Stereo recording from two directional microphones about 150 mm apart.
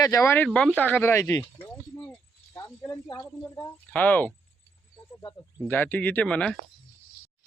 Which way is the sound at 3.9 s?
10° left (ahead or behind).